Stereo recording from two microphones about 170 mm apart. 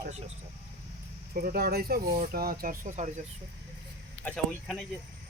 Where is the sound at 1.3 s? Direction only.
60° right (ahead or behind); by 3.2 s 45° right (ahead or behind).